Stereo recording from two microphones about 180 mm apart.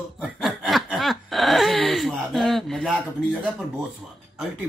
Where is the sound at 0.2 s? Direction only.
Centre (ahead or behind).